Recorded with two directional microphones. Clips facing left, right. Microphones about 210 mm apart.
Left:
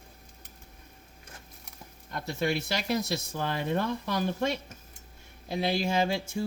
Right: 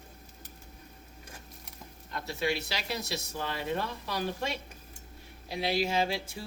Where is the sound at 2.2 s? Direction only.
50° left (ahead or behind).